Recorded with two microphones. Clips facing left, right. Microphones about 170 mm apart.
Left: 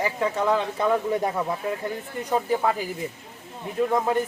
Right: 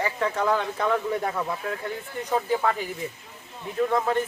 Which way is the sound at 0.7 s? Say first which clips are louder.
Left 2 dB; 15° left (ahead or behind).